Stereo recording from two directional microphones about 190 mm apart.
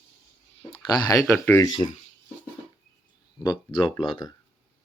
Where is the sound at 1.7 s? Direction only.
25° left (ahead or behind).